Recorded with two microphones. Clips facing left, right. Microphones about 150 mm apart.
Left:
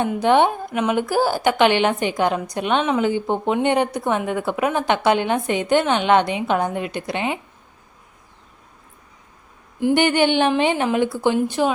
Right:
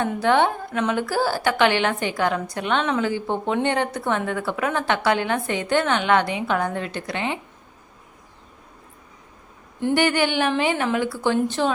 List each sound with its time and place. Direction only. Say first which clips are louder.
0.0 s a woman's voice: left 3 dB; 20° left (ahead or behind)
9.9 s a woman's voice: left 3 dB; 20° left (ahead or behind)